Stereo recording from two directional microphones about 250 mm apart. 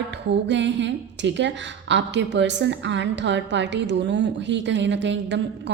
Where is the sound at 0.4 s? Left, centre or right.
Right.